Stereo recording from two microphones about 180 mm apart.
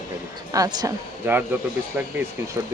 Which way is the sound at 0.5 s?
20° right (ahead or behind).